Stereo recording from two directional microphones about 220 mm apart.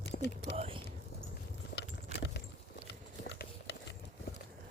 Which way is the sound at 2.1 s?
50° left (ahead or behind).